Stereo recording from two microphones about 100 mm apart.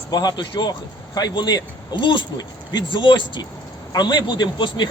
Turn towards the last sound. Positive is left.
turn(degrees=50)  # may be behind; listen again after turning